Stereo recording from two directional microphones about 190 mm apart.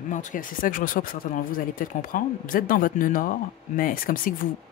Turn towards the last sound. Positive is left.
turn(degrees=50)  # may be behind; listen again after turning